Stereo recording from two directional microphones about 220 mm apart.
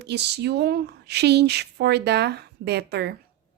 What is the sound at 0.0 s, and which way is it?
A woman's voice, 50° right (ahead or behind).